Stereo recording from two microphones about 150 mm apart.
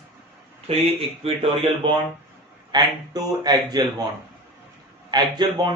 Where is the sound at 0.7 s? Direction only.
40° right (ahead or behind).